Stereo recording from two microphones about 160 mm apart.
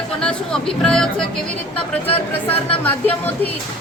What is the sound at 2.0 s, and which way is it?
Speech, 35° left (ahead or behind).